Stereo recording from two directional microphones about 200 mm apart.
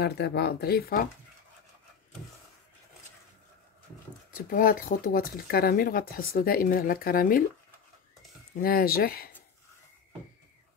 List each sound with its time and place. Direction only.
0.0 s speech: 55° left (ahead or behind)
4.3 s speech: 45° left (ahead or behind)
8.5 s speech: 50° left (ahead or behind)